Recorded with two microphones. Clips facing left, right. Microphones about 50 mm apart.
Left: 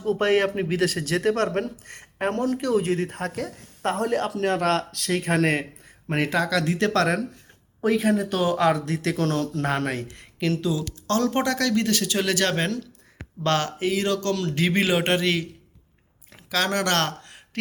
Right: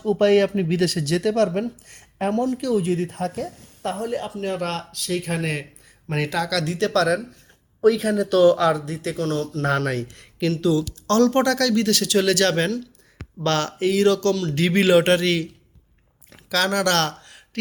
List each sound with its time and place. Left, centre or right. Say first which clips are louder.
0.2 s speech: right 5 dB; left
3.9 s speech: left 4 dB; left
6.1 s speech: left 1 dB; left
8.0 s speech: right 6 dB; centre
8.7 s speech: even; left
9.6 s speech: right 3 dB; centre
16.3 s a sound: right 3 dB; centre